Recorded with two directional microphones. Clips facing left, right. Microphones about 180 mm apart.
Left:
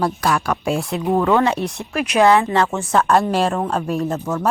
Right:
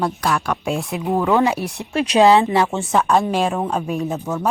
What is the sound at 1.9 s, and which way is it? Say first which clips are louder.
Speech: right 5 dB; 30° right (ahead or behind).